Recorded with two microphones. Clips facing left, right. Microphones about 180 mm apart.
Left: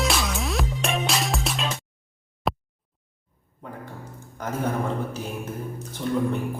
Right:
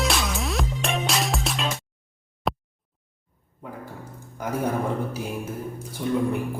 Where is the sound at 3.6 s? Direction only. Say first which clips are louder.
Right 1 dB; 5° right (ahead or behind).